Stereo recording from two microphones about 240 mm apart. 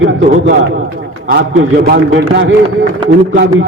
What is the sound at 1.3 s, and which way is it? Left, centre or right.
A man's voice, right.